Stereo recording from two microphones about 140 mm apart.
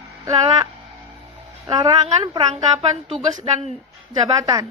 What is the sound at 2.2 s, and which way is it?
Speech, 35° right (ahead or behind).